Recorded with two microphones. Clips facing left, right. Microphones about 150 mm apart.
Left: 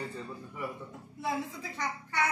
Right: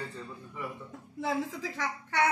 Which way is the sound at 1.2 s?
90° right.